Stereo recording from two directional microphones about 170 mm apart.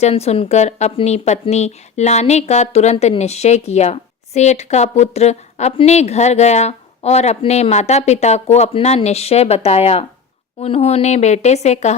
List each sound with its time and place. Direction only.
0.0 s a woman's voice: 40° left (ahead or behind)